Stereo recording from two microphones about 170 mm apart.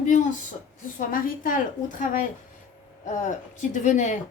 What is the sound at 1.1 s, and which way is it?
A woman's voice, 50° left (ahead or behind).